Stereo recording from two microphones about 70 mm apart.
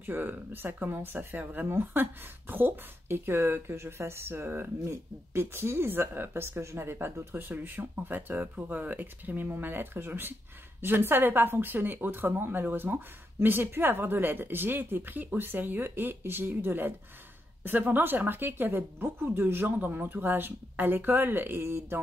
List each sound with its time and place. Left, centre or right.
0.0 s speech: right